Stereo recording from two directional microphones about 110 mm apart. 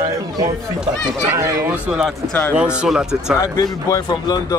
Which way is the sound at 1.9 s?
5° right (ahead or behind).